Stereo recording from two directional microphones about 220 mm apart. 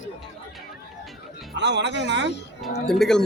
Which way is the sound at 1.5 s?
50° right (ahead or behind).